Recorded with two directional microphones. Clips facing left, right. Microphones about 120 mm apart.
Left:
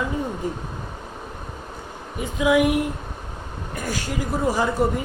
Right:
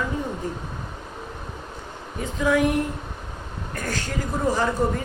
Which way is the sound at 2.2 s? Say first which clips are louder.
Left 2 dB; 10° left (ahead or behind).